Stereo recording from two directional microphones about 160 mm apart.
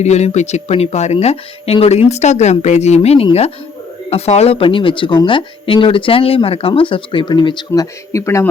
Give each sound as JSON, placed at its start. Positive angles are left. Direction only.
{"t": 0.0, "sound": "speech", "side_deg": 45}
{"t": 7.7, "sound": "speech", "side_deg": 20}